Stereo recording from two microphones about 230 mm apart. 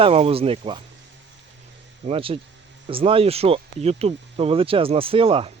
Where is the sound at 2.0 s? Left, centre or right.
Right.